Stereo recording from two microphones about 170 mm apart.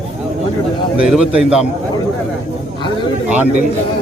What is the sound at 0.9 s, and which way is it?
Speech, 5° right (ahead or behind).